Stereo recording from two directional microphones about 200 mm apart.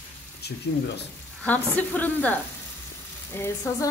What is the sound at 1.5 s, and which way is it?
A woman's voice, 10° left (ahead or behind).